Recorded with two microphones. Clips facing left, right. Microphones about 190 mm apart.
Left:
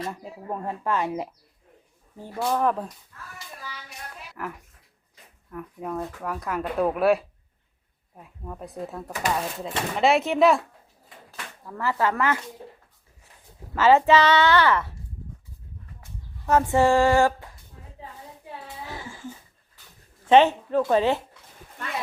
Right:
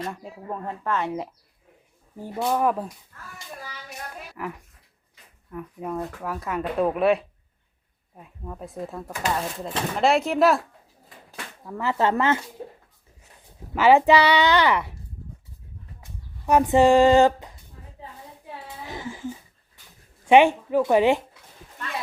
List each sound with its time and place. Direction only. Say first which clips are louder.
0.0 s speech: even; 5° left (ahead or behind)
2.1 s a child's voice: right 1 dB; 15° right (ahead or behind)
4.4 s speech: right 1 dB; centre (ahead or behind)
11.3 s speech: right 3 dB; 15° right (ahead or behind)
13.7 s a child's voice: right 1 dB; 15° right (ahead or behind)
16.5 s a child's voice: right 3 dB; 15° right (ahead or behind)
18.9 s a sound: right 8 dB; 20° right (ahead or behind)
20.2 s a child's voice: right 1 dB; 15° right (ahead or behind)